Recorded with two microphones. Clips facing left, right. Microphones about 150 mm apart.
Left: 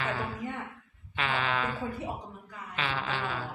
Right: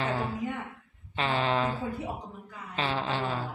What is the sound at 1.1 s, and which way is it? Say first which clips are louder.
Speech: right 3 dB; 30° right (ahead or behind).